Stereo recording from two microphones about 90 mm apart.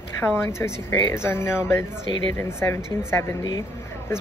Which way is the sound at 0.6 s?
30° left (ahead or behind).